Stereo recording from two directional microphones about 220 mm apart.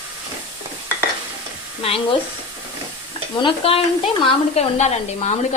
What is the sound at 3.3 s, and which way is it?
A woman's voice, 25° left (ahead or behind).